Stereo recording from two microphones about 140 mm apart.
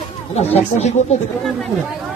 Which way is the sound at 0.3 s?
50° left (ahead or behind).